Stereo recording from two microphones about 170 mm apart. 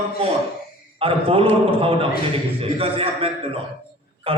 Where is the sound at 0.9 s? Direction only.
35° right (ahead or behind).